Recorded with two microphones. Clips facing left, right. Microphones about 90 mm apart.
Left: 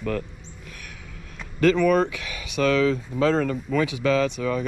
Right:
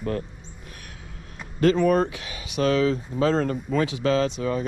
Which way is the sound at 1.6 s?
25° right (ahead or behind).